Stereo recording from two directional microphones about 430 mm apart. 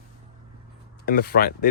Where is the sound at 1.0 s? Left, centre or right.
Left.